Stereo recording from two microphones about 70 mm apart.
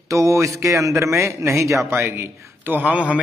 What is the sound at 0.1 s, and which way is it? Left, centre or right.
A man's voice, right.